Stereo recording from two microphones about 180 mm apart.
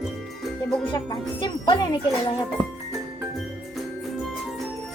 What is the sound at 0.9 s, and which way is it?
Speech, 25° left (ahead or behind).